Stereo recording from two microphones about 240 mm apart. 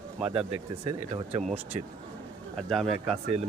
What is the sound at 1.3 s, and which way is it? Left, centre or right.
Speech, right.